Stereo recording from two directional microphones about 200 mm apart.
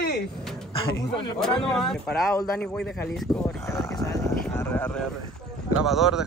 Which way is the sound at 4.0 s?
15° left (ahead or behind).